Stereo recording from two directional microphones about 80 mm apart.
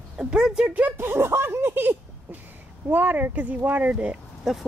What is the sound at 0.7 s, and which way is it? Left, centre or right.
Speech, right.